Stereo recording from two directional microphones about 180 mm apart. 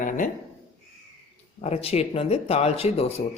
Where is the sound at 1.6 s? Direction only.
35° left (ahead or behind).